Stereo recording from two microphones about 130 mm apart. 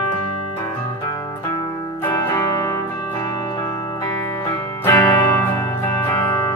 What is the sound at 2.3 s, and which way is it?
Music, 25° left (ahead or behind).